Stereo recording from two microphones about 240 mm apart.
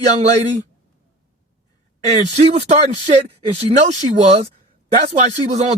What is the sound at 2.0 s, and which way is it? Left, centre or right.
Speech, right.